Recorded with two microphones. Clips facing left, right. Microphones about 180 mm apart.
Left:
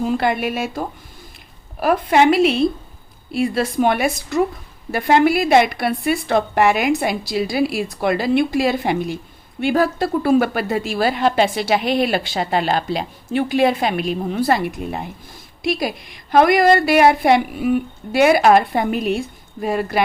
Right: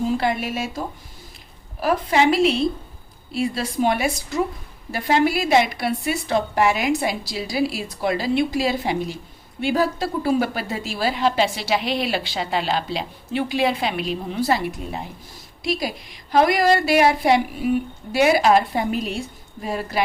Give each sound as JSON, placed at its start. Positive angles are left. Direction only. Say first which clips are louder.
{"t": 0.0, "sound": "a woman's voice", "louder": "left 3 dB", "side_deg": 60}
{"t": 1.8, "sound": "a woman's voice", "louder": "left 4 dB", "side_deg": 60}